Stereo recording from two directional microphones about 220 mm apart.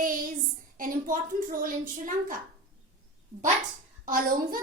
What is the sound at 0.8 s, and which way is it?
A child's voice, 40° right (ahead or behind).